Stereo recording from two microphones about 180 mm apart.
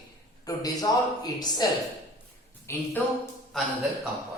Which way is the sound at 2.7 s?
15° left (ahead or behind).